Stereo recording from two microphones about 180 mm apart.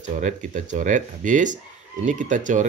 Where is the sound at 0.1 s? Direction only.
45° right (ahead or behind).